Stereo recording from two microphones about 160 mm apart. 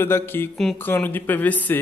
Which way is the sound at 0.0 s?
15° left (ahead or behind).